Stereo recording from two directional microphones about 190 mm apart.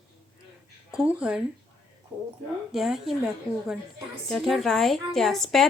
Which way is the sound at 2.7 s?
Centre (ahead or behind).